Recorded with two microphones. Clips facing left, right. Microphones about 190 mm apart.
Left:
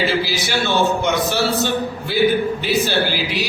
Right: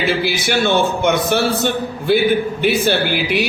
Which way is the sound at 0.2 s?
55° right (ahead or behind).